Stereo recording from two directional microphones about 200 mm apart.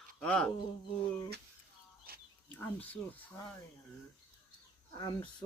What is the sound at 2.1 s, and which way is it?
Goat, 50° right (ahead or behind).